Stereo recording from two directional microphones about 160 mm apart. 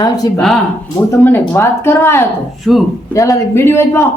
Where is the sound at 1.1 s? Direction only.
15° left (ahead or behind).